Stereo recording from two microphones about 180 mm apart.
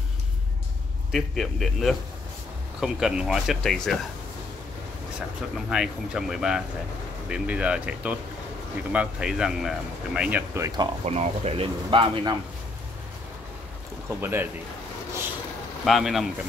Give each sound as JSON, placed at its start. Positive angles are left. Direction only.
{"t": 1.1, "sound": "speech", "side_deg": 0}
{"t": 5.7, "sound": "speech", "side_deg": -5}
{"t": 11.1, "sound": "speech", "side_deg": -35}
{"t": 14.2, "sound": "speech", "side_deg": -10}
{"t": 15.8, "sound": "speech", "side_deg": 0}